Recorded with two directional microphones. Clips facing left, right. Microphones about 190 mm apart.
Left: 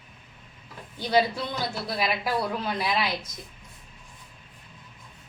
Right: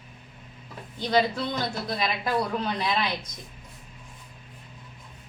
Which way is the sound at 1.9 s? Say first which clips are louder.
Even; 5° left (ahead or behind).